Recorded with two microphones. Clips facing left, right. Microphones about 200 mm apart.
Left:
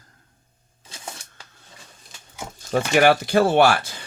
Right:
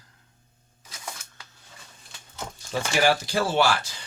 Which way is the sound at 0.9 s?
30° left (ahead or behind).